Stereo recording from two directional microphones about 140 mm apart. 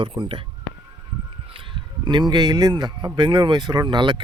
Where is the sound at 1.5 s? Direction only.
35° right (ahead or behind).